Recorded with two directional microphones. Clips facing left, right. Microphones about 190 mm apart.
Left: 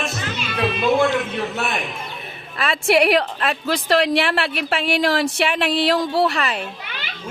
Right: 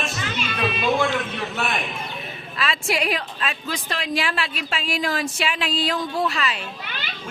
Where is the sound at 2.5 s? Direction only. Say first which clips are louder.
Left 7 dB; 55° left (ahead or behind).